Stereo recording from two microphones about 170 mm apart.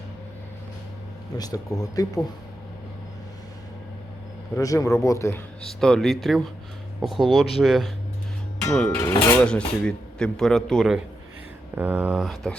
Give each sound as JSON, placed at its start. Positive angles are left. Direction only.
{"t": 1.4, "sound": "speech", "side_deg": 20}
{"t": 4.5, "sound": "speech", "side_deg": 20}
{"t": 5.8, "sound": "speech", "side_deg": 5}
{"t": 9.0, "sound": "speech", "side_deg": 15}
{"t": 11.7, "sound": "speech", "side_deg": -10}